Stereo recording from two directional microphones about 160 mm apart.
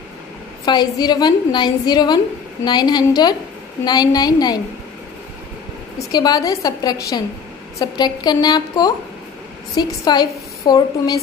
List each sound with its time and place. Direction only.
0.7 s a woman's voice: 25° left (ahead or behind)
6.1 s a woman's voice: 25° left (ahead or behind)